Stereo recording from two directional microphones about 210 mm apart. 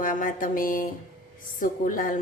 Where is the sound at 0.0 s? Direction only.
40° left (ahead or behind).